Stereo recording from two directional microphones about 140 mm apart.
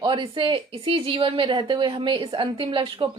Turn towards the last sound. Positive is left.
turn(degrees=-35)  # may be behind; listen again after turning